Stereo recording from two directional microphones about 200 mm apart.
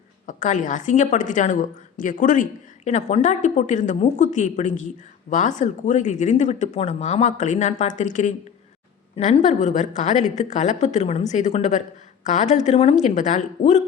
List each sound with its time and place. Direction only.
0.3 s a woman's voice: 40° left (ahead or behind)